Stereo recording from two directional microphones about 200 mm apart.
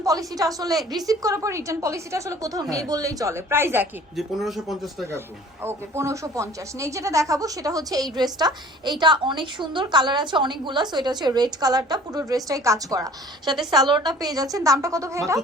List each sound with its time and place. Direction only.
0.0 s a woman's voice: 15° right (ahead or behind); by 5.0 s centre (ahead or behind)
5.6 s a woman's voice: 15° right (ahead or behind)